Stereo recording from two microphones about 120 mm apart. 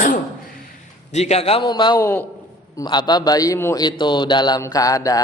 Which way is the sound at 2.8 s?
35° left (ahead or behind).